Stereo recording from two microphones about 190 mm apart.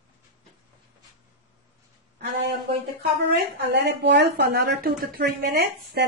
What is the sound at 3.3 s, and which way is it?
Speech, 60° right (ahead or behind).